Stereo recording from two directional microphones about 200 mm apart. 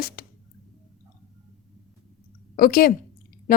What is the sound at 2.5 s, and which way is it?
Speech, 45° left (ahead or behind).